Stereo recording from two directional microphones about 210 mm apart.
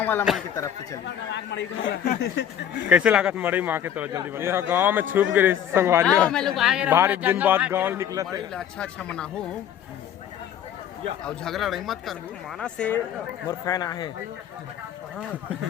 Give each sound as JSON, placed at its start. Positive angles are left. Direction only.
{"t": 0.0, "sound": "speech", "side_deg": 10}
{"t": 1.0, "sound": "speech", "side_deg": 55}
{"t": 2.9, "sound": "a man's voice", "side_deg": -5}
{"t": 6.2, "sound": "a man's voice", "side_deg": 0}
{"t": 8.5, "sound": "speech", "side_deg": 5}
{"t": 11.2, "sound": "speech", "side_deg": 5}
{"t": 13.5, "sound": "speech", "side_deg": 15}